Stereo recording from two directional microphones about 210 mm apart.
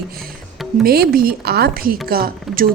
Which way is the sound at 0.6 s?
Centre (ahead or behind).